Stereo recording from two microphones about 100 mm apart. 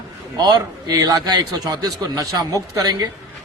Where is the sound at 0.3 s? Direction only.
40° right (ahead or behind).